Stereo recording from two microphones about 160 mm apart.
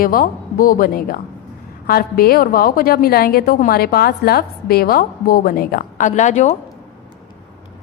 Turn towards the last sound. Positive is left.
turn(degrees=50)  # may be behind; listen again after turning